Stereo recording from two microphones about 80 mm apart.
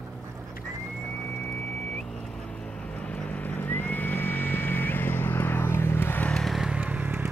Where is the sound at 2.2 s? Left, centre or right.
Centre; by 6.3 s left.